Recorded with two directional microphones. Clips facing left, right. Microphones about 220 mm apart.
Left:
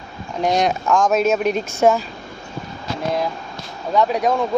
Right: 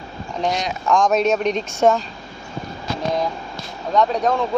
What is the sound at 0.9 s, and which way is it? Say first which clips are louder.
Speech: right 2 dB; 5° left (ahead or behind).